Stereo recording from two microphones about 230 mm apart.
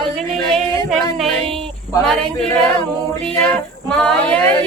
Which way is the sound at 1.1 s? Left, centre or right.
Centre.